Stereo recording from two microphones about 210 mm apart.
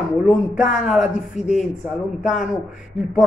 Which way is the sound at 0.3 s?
Centre (ahead or behind).